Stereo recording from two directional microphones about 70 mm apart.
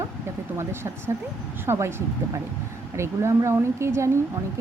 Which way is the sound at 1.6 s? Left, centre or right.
Right.